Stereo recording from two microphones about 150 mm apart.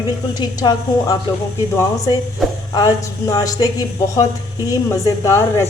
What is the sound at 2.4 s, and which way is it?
Speech, centre (ahead or behind).